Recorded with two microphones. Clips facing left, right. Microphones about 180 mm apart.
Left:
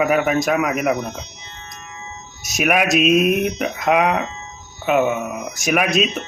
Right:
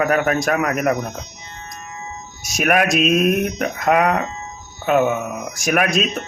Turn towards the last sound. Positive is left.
turn(degrees=0)  # may be behind; listen again after turning